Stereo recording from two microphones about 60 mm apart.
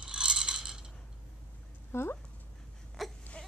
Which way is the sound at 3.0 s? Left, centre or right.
Centre.